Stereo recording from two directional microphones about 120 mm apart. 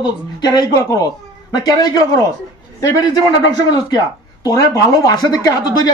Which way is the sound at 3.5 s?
40° left (ahead or behind).